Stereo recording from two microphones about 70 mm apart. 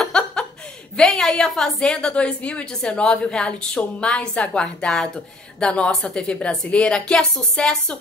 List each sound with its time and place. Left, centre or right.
0.0 s chuckle: centre
0.9 s a woman's voice: centre